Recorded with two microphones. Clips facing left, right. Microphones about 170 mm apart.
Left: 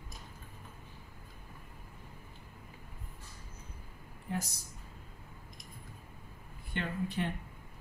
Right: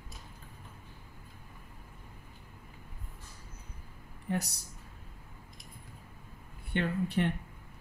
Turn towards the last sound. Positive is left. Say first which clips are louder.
# right 5 dB
turn(degrees=-65)  # may be behind; listen again after turning